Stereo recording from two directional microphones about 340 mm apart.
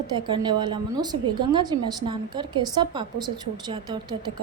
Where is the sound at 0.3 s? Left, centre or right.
Centre.